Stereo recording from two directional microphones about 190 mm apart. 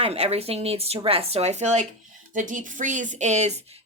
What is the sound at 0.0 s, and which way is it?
A woman's voice, 30° right (ahead or behind).